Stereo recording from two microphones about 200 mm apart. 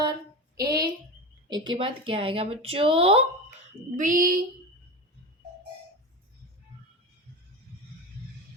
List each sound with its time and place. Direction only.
0.6 s a sound: 20° right (ahead or behind)
1.5 s speech: 20° right (ahead or behind)
3.9 s speech: 40° right (ahead or behind)